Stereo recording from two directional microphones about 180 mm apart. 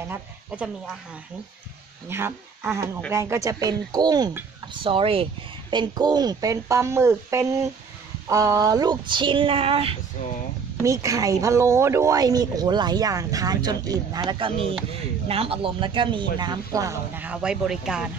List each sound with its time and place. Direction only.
0.1 s speech: 5° right (ahead or behind)
2.0 s speech: 15° right (ahead or behind)
4.8 s speech: 30° right (ahead or behind)
10.8 s speech: 15° right (ahead or behind)